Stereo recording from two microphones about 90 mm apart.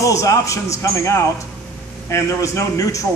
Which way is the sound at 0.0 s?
35° left (ahead or behind).